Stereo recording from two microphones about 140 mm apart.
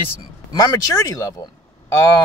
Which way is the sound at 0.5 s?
25° left (ahead or behind).